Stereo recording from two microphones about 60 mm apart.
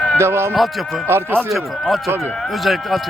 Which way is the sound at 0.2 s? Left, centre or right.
Right.